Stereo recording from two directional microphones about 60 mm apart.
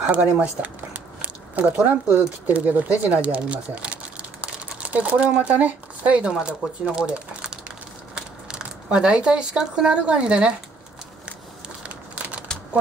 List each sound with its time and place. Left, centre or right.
0.1 s speech: right
11.8 s crumpling: right